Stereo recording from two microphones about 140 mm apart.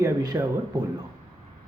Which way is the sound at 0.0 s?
25° right (ahead or behind).